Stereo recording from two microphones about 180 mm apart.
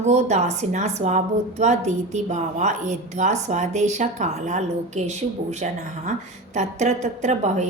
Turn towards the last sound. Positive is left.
turn(degrees=-40)  # may be behind; listen again after turning